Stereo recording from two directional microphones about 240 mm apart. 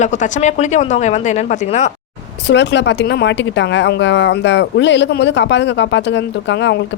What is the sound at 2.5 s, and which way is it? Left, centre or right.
Speech, left.